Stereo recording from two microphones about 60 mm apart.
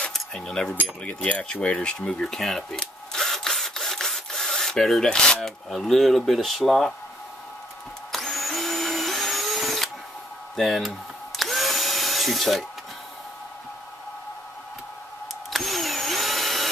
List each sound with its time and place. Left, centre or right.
0.1 s speech: centre
1.0 s speech: left
2.0 s tools: centre
5.7 s speech: centre
8.1 s vacuum cleaner: centre
10.5 s speech: centre
11.3 s drill: centre
15.5 s drill: centre